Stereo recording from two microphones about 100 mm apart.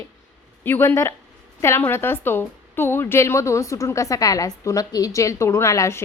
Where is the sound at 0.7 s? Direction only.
25° left (ahead or behind).